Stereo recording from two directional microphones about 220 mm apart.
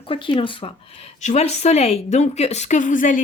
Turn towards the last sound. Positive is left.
turn(degrees=35)  # may be behind; listen again after turning